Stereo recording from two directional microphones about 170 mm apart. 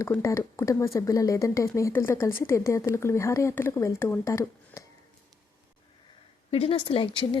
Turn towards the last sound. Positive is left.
turn(degrees=30)  # may be behind; listen again after turning